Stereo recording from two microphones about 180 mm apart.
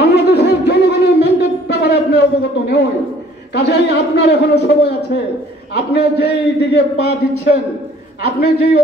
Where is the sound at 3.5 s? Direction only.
65° left (ahead or behind).